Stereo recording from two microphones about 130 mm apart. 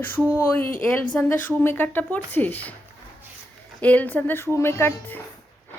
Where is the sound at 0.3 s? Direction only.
15° left (ahead or behind).